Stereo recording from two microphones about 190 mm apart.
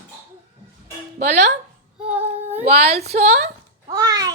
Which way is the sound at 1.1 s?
40° right (ahead or behind).